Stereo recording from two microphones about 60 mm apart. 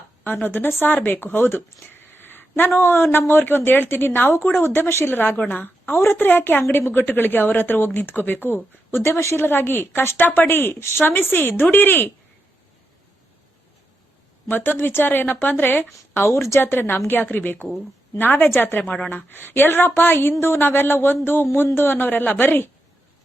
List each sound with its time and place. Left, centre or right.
0.4 s speech: left
9.4 s speech: left
14.5 s speech: left
16.3 s speech: left